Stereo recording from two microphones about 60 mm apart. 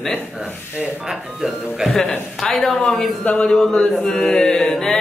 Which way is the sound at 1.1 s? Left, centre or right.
Centre.